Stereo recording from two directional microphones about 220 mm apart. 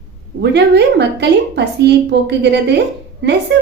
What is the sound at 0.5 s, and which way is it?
A woman's voice, 50° right (ahead or behind).